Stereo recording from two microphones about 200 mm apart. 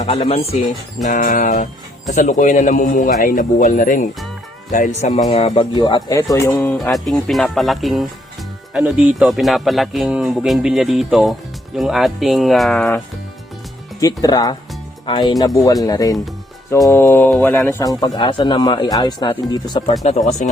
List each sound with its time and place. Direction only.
0.0 s a man's voice: 30° left (ahead or behind)
1.0 s a man's voice: 40° left (ahead or behind); by 6.7 s 15° left (ahead or behind)
6.7 s speech: centre (ahead or behind)
14.0 s speech: 20° left (ahead or behind)
20.1 s a man's voice: 35° left (ahead or behind)